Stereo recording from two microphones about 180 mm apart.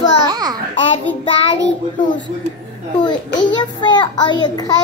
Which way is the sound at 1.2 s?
30° left (ahead or behind).